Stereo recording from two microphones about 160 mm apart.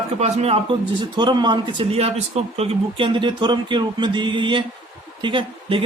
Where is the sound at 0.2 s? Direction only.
40° right (ahead or behind).